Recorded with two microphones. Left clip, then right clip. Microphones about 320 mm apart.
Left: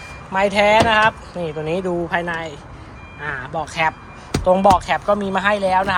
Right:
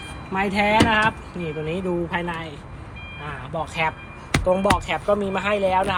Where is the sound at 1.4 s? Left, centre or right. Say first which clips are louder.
Left 5 dB; left.